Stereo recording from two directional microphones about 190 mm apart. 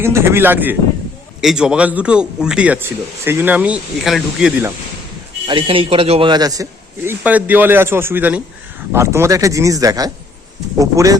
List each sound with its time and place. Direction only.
0.0 s a man's voice: 15° right (ahead or behind)
5.5 s a man's voice: 25° right (ahead or behind)